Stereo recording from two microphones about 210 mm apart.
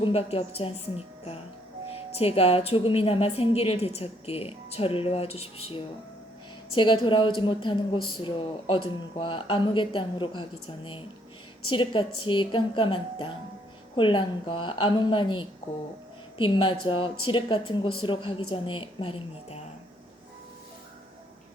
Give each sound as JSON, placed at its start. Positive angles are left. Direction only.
{"t": 0.0, "sound": "a woman's voice", "side_deg": 25}
{"t": 11.6, "sound": "a woman's voice", "side_deg": 25}